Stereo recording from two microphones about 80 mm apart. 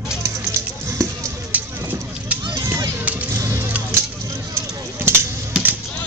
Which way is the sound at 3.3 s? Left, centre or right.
Right.